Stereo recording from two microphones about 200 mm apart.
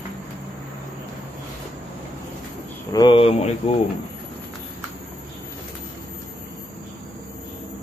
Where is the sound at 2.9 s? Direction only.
25° left (ahead or behind).